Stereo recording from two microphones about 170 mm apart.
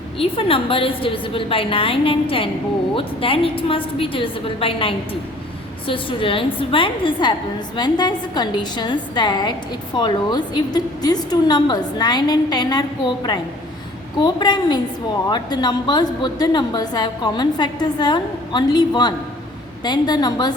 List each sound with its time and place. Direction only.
0.2 s a woman's voice: 35° left (ahead or behind)
14.2 s a woman's voice: 25° left (ahead or behind)